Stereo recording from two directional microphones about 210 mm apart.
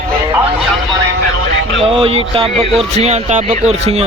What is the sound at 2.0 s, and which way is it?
Speech, 25° right (ahead or behind).